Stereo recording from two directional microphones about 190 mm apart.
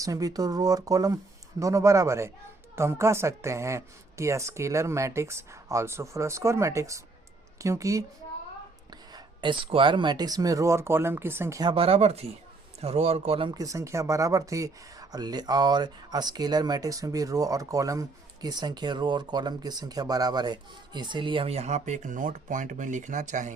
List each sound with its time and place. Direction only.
0.0 s speech: 20° right (ahead or behind)
11.7 s speech: 30° right (ahead or behind)